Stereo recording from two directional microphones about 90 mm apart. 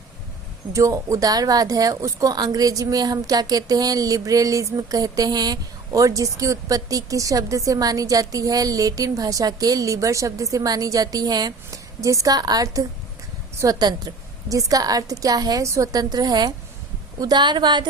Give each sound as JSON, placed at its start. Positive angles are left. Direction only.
{"t": 0.7, "sound": "a woman's voice", "side_deg": -35}